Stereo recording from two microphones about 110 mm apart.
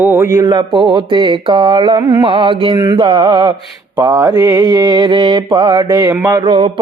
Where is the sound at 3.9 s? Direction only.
45° right (ahead or behind).